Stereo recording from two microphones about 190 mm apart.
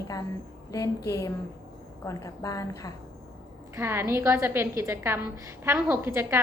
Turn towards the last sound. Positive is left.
turn(degrees=-10)  # may be behind; listen again after turning